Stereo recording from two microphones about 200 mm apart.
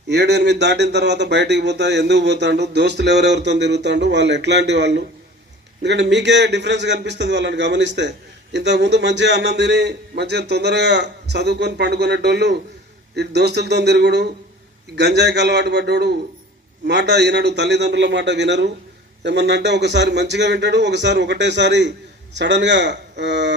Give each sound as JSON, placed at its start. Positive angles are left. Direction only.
{"t": 0.1, "sound": "speech", "side_deg": -55}